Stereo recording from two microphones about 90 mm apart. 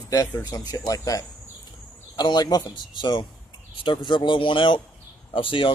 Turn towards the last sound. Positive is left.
turn(degrees=75)  # may be behind; listen again after turning